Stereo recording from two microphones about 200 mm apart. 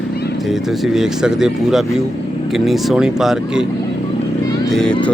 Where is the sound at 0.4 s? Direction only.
Centre (ahead or behind).